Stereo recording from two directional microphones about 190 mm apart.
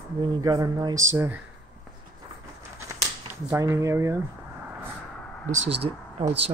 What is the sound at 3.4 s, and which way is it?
Speech, 15° right (ahead or behind).